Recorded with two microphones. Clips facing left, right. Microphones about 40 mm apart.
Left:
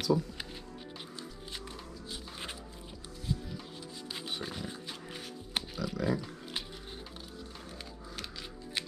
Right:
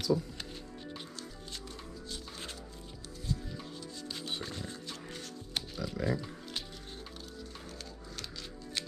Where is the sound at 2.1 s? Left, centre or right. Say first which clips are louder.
Left 2 dB; centre.